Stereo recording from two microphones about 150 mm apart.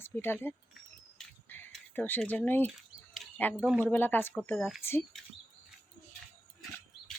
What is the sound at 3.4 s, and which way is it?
Speech, 10° left (ahead or behind).